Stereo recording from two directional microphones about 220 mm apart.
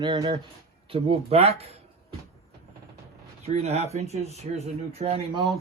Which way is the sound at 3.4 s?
30° right (ahead or behind).